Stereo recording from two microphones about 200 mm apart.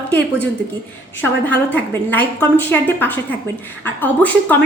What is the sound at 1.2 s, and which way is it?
A woman's voice, 10° left (ahead or behind).